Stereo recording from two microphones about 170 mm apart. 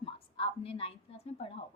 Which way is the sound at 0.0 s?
35° left (ahead or behind).